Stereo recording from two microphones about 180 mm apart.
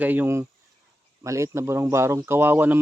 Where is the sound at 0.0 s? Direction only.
10° right (ahead or behind).